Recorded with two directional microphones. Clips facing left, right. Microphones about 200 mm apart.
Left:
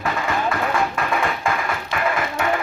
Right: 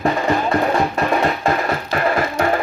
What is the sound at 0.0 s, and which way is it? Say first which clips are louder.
Music: right 5 dB; 35° right (ahead or behind).